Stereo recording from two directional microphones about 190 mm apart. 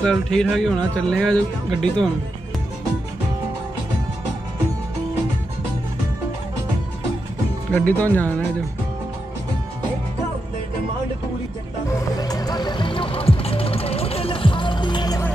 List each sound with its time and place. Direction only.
0.0 s speech: 5° left (ahead or behind)
7.7 s speech: 10° left (ahead or behind)
12.2 s music: 20° left (ahead or behind)